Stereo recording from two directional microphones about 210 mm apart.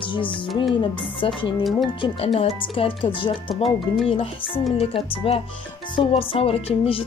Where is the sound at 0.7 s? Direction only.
25° left (ahead or behind).